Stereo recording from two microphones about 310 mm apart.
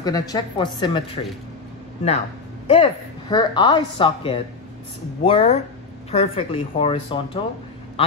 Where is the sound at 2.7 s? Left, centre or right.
Centre.